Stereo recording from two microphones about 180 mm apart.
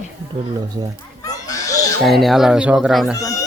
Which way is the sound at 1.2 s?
20° left (ahead or behind).